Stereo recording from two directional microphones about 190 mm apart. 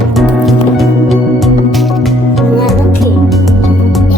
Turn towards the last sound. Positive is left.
turn(degrees=0)  # may be behind; listen again after turning